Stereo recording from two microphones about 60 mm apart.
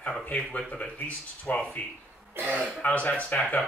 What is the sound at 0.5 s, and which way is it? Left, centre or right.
Speech, left.